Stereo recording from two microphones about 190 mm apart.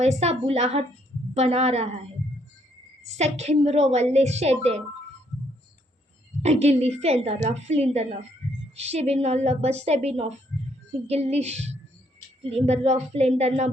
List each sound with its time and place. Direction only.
0.0 s a woman's voice: 35° right (ahead or behind)
3.0 s a woman's voice: 35° right (ahead or behind)
6.4 s a woman's voice: 35° right (ahead or behind)